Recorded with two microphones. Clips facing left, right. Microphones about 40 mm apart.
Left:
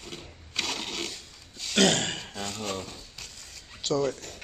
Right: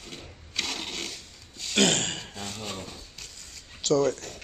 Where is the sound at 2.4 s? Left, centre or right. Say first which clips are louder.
Left 4 dB; left.